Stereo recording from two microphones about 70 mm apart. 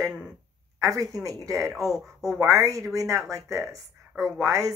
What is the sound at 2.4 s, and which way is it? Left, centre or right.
Speech, right.